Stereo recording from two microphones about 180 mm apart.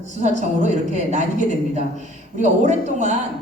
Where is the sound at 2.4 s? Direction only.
40° right (ahead or behind).